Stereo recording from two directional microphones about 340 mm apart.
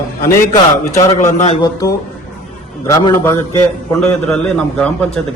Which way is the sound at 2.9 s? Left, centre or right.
Centre.